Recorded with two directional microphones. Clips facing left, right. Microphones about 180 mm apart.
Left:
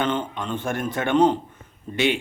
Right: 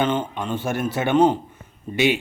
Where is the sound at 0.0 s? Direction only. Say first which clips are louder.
Right 2 dB; 10° right (ahead or behind).